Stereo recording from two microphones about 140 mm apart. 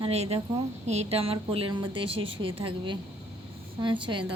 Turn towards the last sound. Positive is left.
turn(degrees=-35)  # may be behind; listen again after turning